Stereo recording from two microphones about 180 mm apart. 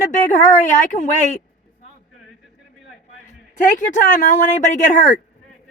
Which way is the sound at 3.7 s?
45° left (ahead or behind).